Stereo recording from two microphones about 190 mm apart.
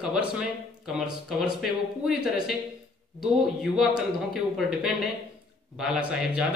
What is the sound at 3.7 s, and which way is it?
Speech, centre (ahead or behind).